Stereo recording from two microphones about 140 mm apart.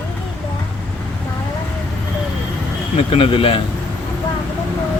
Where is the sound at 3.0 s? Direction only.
40° left (ahead or behind).